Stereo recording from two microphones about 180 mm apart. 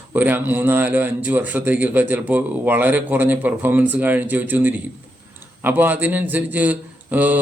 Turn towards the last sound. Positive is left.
turn(degrees=-10)  # may be behind; listen again after turning